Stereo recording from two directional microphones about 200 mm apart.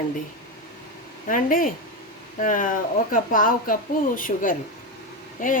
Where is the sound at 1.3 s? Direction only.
45° left (ahead or behind).